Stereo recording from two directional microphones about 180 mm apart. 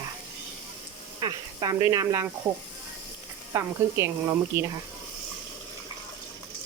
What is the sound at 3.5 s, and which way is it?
Sizzle, 15° right (ahead or behind).